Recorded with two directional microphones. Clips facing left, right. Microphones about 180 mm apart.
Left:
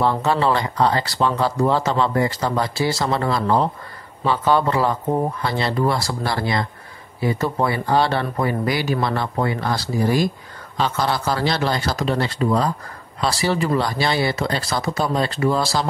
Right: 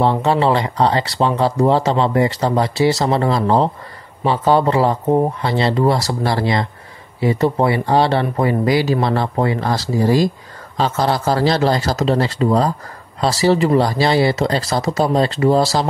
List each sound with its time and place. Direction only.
0.0 s speech: 30° right (ahead or behind)
10.8 s speech: 40° right (ahead or behind)
15.0 s speech: 25° right (ahead or behind)
15.6 s speech: 40° right (ahead or behind)